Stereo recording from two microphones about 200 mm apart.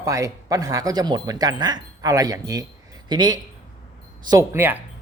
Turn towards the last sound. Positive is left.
turn(degrees=-10)  # may be behind; listen again after turning